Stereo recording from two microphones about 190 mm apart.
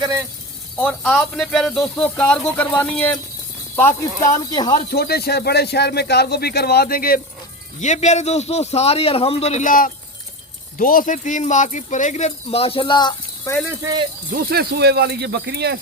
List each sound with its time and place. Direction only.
0.8 s speech: 10° left (ahead or behind)
4.7 s speech: 55° left (ahead or behind)
7.8 s speech: 40° left (ahead or behind); by 13.5 s 20° left (ahead or behind)
13.8 s speech: 20° right (ahead or behind)
14.3 s speech: 55° right (ahead or behind)